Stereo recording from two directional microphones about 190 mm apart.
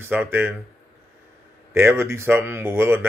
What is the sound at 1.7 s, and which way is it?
Speech, 10° right (ahead or behind).